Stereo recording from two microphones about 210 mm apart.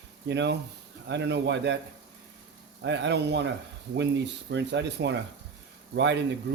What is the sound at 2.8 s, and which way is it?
Speech, 60° right (ahead or behind).